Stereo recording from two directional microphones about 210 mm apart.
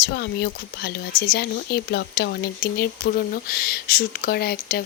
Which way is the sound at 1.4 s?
50° left (ahead or behind).